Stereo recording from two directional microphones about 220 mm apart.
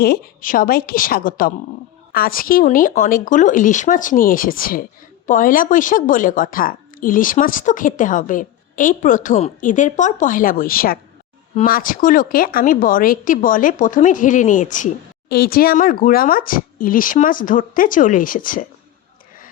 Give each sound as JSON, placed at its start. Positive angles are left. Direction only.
{"t": 0.0, "sound": "speech", "side_deg": 40}